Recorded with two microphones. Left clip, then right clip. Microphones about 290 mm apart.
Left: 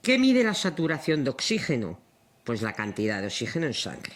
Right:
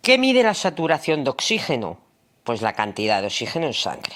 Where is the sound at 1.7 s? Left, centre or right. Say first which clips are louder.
Right 6 dB; right.